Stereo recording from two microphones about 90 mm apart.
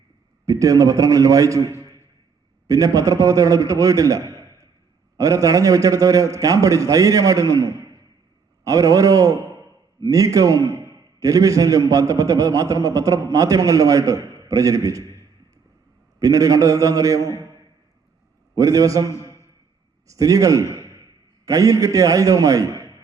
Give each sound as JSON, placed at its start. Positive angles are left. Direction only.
{"t": 0.4, "sound": "a man's voice", "side_deg": -40}
{"t": 16.2, "sound": "a man's voice", "side_deg": -40}
{"t": 18.5, "sound": "a man's voice", "side_deg": -40}